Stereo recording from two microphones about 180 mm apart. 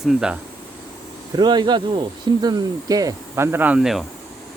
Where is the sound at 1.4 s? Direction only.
25° right (ahead or behind); by 4.0 s 5° right (ahead or behind).